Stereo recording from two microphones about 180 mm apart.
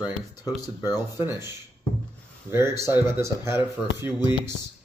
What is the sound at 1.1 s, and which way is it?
Speech, 15° right (ahead or behind).